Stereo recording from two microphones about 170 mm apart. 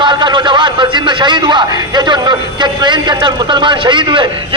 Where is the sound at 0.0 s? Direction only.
25° right (ahead or behind).